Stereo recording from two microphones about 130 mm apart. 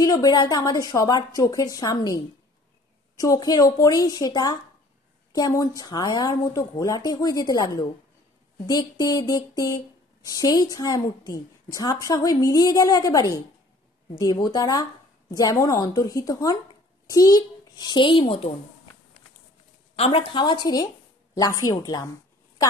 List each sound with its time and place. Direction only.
0.0 s a woman's voice: 30° left (ahead or behind); by 18.5 s 45° left (ahead or behind)
20.0 s a child's voice: 45° left (ahead or behind); by 22.1 s 30° left (ahead or behind)